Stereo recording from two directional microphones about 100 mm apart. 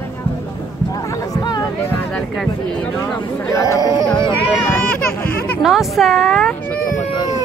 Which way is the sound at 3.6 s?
35° left (ahead or behind).